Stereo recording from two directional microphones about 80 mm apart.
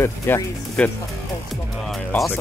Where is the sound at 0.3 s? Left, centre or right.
Left.